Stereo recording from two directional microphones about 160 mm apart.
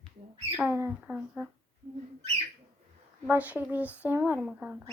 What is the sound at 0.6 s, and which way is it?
Speech, 10° right (ahead or behind).